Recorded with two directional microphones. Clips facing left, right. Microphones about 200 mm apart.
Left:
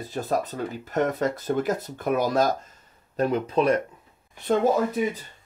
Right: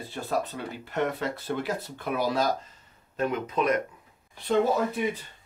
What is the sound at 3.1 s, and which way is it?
Speech, 35° left (ahead or behind).